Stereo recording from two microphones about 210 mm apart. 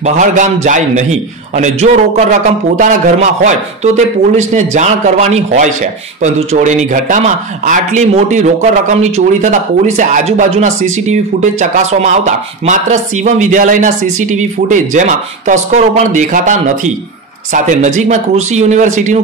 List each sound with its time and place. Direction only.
0.0 s speech: 35° right (ahead or behind)